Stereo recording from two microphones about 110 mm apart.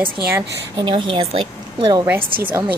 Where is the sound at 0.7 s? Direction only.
50° right (ahead or behind).